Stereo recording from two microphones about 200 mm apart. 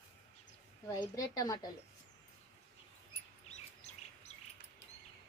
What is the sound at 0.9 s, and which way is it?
Speech, 20° left (ahead or behind).